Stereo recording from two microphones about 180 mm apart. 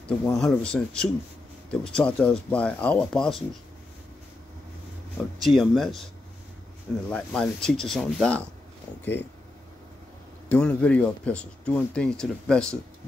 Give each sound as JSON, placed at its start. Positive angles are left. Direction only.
{"t": 0.3, "sound": "speech", "side_deg": 5}
{"t": 5.1, "sound": "speech", "side_deg": 0}
{"t": 7.1, "sound": "speech", "side_deg": 5}
{"t": 10.5, "sound": "speech", "side_deg": 10}